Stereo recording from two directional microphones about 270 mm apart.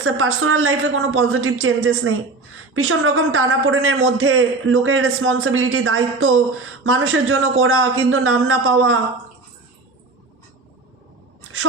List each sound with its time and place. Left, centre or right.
0.0 s a man's voice: right